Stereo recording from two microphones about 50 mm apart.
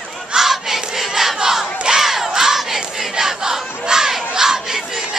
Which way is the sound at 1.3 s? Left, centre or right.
Centre.